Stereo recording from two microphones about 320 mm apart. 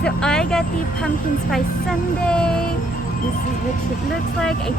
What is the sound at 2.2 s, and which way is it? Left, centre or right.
Speech, centre.